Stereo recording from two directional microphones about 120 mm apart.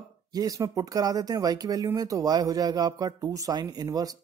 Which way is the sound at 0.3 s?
30° right (ahead or behind).